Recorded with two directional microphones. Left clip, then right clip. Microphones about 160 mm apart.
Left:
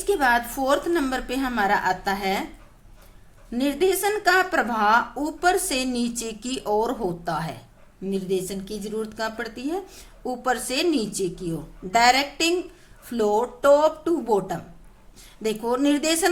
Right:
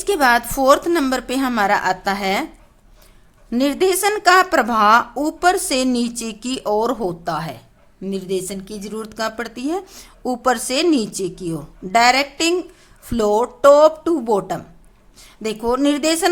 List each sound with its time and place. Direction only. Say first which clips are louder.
0.0 s a woman's voice: right 5 dB; 40° right (ahead or behind)
3.5 s a woman's voice: right 5 dB; 40° right (ahead or behind)